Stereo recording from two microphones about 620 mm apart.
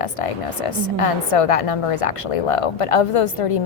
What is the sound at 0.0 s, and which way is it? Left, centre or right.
A woman's voice, left.